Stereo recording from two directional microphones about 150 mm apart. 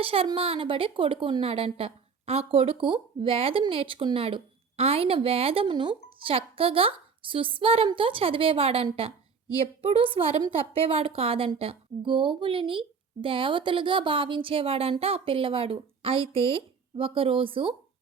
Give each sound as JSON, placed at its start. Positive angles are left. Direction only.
{"t": 0.0, "sound": "a woman's voice", "side_deg": -40}